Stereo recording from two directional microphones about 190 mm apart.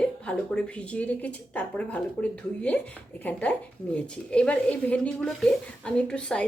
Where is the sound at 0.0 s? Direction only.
5° left (ahead or behind).